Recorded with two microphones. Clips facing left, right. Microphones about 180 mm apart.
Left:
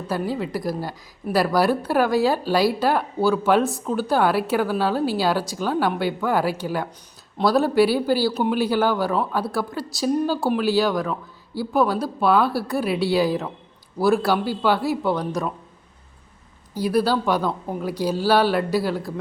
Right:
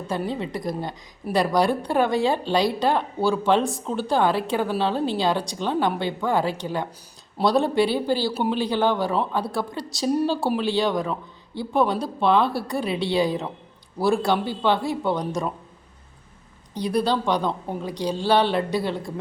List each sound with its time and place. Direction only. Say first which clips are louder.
0.1 s speech: left 2 dB; 5° left (ahead or behind)
16.7 s speech: left 2 dB; 5° left (ahead or behind)